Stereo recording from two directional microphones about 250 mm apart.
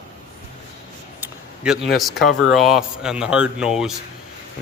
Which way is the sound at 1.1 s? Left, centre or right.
Centre.